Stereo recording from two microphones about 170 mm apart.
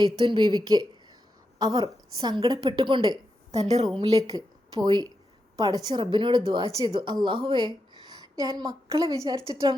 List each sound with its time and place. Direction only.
0.0 s a woman's voice: 25° right (ahead or behind)
3.5 s a woman's voice: 40° right (ahead or behind)
3.9 s a woman's voice: 20° right (ahead or behind)